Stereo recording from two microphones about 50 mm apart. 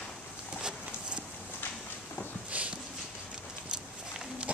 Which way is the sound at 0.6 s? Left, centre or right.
Right.